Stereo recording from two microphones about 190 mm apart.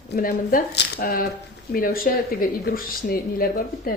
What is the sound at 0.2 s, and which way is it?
A woman's voice, 50° left (ahead or behind).